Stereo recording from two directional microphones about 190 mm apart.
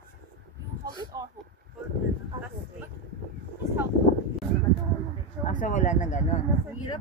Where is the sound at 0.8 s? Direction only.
20° right (ahead or behind).